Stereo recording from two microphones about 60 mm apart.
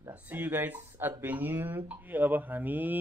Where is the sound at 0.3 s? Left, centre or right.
Right.